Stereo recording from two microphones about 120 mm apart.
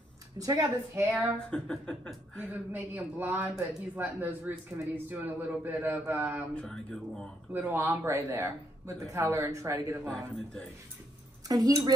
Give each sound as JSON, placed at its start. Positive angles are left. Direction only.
{"t": 0.4, "sound": "speech", "side_deg": -30}
{"t": 1.2, "sound": "speech", "side_deg": 5}
{"t": 2.4, "sound": "speech", "side_deg": -15}
{"t": 6.5, "sound": "speech", "side_deg": 5}
{"t": 7.5, "sound": "speech", "side_deg": -15}
{"t": 11.4, "sound": "speech", "side_deg": -30}